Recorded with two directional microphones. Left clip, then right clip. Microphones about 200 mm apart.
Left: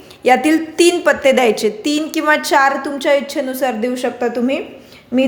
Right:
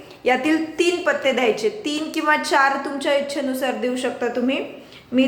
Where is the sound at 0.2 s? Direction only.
40° left (ahead or behind).